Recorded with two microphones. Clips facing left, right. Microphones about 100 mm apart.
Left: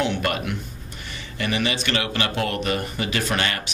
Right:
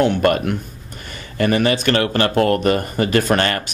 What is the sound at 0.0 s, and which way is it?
Speech, 45° right (ahead or behind).